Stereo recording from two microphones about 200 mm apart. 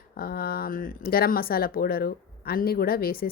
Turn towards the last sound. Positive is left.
turn(degrees=50)  # may be behind; listen again after turning